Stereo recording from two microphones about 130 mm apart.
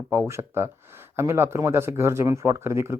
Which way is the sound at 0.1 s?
20° right (ahead or behind).